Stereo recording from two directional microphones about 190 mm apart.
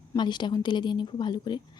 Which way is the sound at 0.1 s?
25° left (ahead or behind).